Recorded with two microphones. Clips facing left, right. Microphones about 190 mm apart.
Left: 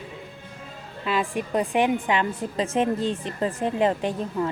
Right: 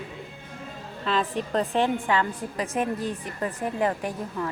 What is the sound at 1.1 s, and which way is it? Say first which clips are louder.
A woman's voice: left 1 dB; 10° left (ahead or behind).